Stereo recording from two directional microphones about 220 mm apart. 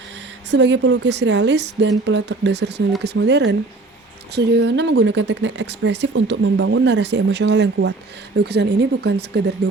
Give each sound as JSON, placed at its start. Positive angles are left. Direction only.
{"t": 0.5, "sound": "speech", "side_deg": -55}